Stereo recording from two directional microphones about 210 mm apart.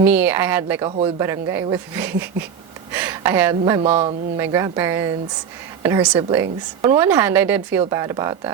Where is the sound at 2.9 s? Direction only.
10° right (ahead or behind).